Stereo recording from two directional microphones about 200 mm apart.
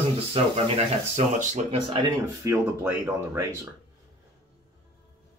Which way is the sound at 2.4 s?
10° right (ahead or behind).